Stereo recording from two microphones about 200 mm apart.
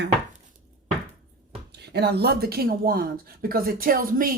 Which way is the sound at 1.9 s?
55° right (ahead or behind).